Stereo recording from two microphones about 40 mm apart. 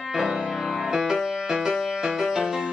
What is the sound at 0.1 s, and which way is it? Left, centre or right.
Music, centre.